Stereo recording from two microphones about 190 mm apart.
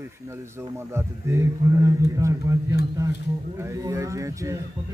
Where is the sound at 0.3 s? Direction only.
15° right (ahead or behind).